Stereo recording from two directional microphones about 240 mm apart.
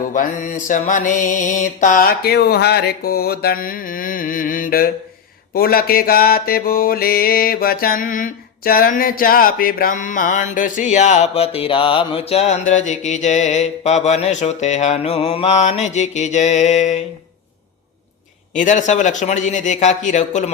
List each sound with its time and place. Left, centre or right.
0.1 s mantra: left
18.5 s mantra: left